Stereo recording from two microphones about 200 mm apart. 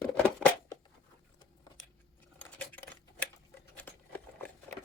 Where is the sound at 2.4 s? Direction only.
10° left (ahead or behind).